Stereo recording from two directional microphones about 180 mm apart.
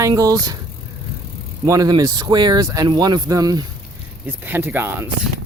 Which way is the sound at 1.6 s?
20° right (ahead or behind).